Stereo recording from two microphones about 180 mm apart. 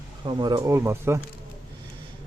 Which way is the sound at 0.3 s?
25° right (ahead or behind).